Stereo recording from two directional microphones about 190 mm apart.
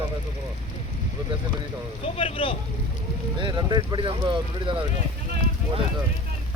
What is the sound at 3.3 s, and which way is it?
Speech, 25° right (ahead or behind).